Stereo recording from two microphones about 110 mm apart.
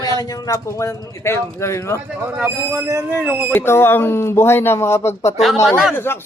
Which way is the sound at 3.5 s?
20° left (ahead or behind).